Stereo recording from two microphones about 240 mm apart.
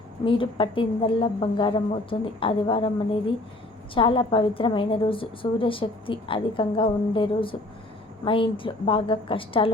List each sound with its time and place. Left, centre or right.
0.3 s a woman's voice: left